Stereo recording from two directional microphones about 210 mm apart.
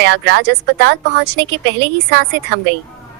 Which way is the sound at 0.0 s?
50° right (ahead or behind).